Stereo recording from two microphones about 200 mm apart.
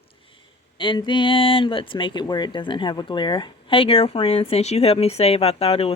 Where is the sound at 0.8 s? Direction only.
25° left (ahead or behind).